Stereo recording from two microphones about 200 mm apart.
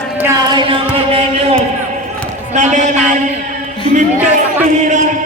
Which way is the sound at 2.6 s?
35° right (ahead or behind).